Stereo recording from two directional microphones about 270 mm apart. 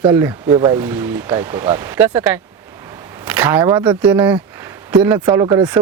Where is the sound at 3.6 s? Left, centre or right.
Centre.